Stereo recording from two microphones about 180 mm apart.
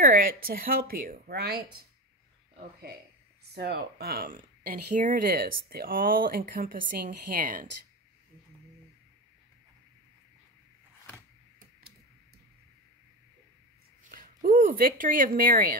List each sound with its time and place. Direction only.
0.1 s a woman's voice: 55° right (ahead or behind)
4.9 s speech: 50° right (ahead or behind)
14.0 s speech: 50° right (ahead or behind)